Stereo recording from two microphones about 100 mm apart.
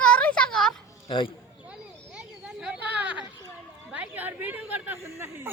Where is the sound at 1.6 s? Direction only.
10° right (ahead or behind).